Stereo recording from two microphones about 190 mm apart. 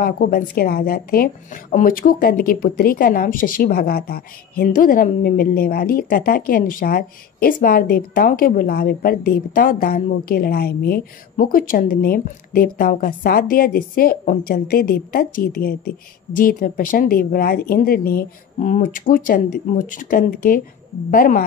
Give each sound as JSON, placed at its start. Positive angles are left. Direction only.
{"t": 0.0, "sound": "a woman's voice", "side_deg": 50}